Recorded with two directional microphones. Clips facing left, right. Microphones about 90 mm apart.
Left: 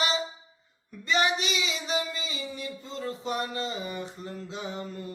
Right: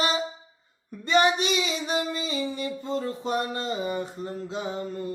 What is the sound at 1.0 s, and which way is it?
Female singing, 50° right (ahead or behind).